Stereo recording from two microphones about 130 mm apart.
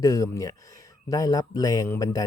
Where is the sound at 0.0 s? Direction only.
25° left (ahead or behind).